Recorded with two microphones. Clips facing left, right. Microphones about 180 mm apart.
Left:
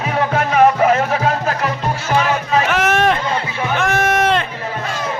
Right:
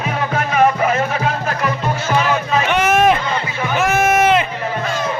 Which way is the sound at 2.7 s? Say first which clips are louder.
Right 5 dB; centre (ahead or behind).